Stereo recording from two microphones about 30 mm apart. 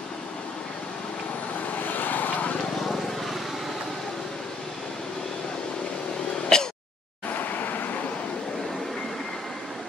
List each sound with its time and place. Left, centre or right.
1.7 s vehicle: left
6.5 s a sound: left
7.2 s vehicle: left